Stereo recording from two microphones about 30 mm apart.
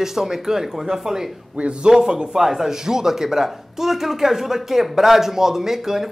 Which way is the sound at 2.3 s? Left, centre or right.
Centre.